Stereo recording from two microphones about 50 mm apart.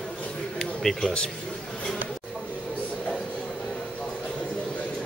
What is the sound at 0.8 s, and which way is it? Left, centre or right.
Speech, centre.